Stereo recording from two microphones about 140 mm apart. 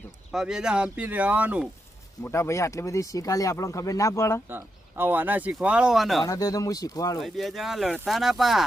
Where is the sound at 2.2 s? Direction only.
20° left (ahead or behind).